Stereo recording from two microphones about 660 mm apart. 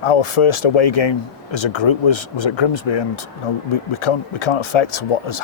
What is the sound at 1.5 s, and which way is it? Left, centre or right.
Speech, left.